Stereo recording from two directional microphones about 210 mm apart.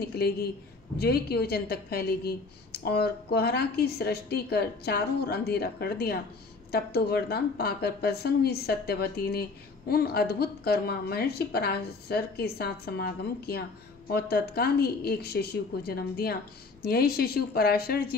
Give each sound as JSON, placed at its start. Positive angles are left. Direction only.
{"t": 0.2, "sound": "a woman's voice", "side_deg": 50}